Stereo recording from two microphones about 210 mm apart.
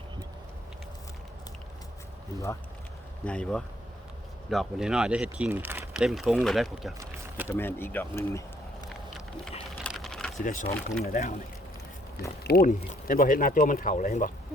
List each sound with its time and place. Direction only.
3.2 s speech: 5° left (ahead or behind)
7.4 s speech: 10° left (ahead or behind)
9.8 s typing: centre (ahead or behind)
10.4 s speech: 40° left (ahead or behind)
12.4 s speech: 45° left (ahead or behind)